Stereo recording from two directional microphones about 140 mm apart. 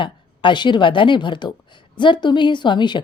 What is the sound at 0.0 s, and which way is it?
A woman's voice, 35° left (ahead or behind).